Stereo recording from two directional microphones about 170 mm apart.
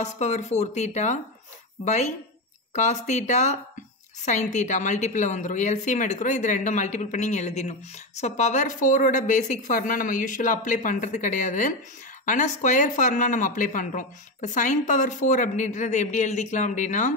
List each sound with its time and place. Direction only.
0.0 s speech: 45° left (ahead or behind)